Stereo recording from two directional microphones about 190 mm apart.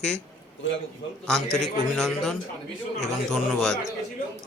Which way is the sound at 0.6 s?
80° left.